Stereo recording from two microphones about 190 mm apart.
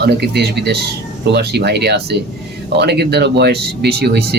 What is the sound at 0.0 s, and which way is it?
Speech, 60° right (ahead or behind).